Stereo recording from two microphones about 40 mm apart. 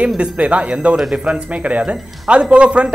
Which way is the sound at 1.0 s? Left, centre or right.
Centre.